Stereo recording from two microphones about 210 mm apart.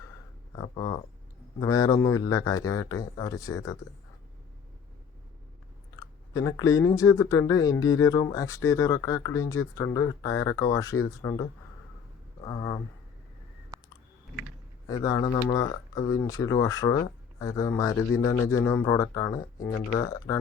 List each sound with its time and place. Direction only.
0.5 s speech: 20° left (ahead or behind)
6.0 s speech: 15° left (ahead or behind)
12.5 s speech: 20° left (ahead or behind)
14.8 s speech: 15° left (ahead or behind)